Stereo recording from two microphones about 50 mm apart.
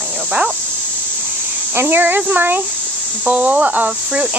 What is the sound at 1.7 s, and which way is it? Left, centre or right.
Speech, right.